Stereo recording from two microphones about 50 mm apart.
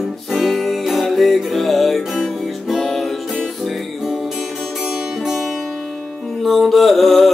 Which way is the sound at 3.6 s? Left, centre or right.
Centre.